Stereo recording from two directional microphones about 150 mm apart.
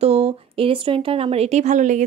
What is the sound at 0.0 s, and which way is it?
A woman's voice, 40° right (ahead or behind).